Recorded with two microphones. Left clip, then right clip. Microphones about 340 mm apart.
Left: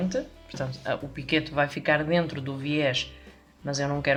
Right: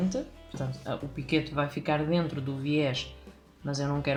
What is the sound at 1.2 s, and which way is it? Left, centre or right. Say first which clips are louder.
Speech: left 4 dB; left.